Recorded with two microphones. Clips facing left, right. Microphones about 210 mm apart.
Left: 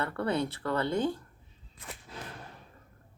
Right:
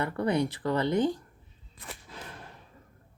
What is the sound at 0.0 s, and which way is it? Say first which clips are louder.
Speech: right 3 dB; 15° right (ahead or behind).